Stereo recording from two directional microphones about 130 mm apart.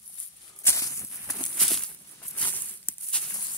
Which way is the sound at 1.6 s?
Centre (ahead or behind).